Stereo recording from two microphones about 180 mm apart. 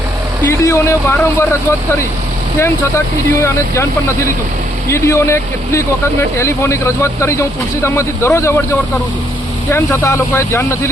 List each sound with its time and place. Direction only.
0.4 s speech: 15° left (ahead or behind)
3.4 s speech: 15° left (ahead or behind)